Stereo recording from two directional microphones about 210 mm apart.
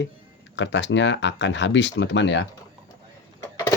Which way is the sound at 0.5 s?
60° left (ahead or behind).